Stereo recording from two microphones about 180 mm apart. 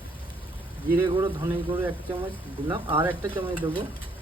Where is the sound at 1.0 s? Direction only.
20° right (ahead or behind).